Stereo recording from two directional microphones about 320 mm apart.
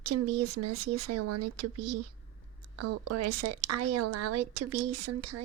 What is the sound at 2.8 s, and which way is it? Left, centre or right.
Speech, right.